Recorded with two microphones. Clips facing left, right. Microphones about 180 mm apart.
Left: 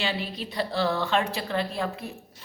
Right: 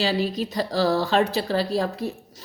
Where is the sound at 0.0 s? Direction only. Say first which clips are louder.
Right 7 dB; 40° right (ahead or behind).